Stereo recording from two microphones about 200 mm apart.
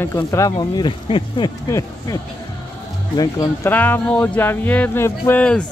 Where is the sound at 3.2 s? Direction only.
15° left (ahead or behind).